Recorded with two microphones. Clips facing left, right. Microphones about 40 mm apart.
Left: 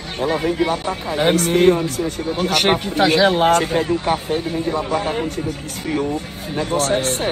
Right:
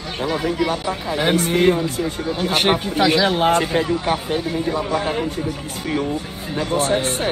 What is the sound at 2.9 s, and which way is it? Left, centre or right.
Speech, left.